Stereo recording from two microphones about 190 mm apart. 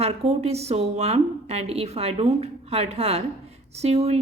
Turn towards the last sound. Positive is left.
turn(degrees=-35)  # may be behind; listen again after turning